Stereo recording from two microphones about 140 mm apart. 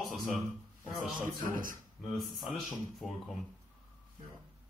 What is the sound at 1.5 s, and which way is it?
Speech, 75° right (ahead or behind).